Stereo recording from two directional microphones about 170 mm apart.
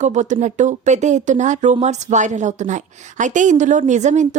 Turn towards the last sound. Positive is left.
turn(degrees=-45)  # may be behind; listen again after turning